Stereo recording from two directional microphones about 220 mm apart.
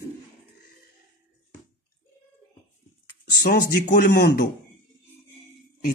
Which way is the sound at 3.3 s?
45° left (ahead or behind).